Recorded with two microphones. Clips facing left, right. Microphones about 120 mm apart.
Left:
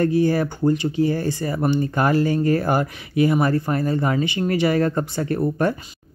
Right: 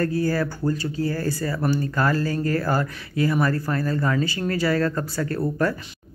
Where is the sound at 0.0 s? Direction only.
20° left (ahead or behind).